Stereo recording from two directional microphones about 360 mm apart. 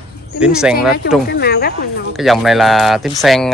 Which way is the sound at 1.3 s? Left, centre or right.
Left.